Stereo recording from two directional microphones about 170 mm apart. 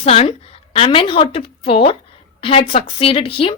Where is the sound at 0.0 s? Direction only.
35° left (ahead or behind).